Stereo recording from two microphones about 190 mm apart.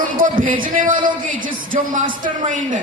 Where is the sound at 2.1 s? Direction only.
45° right (ahead or behind).